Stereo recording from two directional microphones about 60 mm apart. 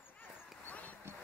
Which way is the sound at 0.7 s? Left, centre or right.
Left.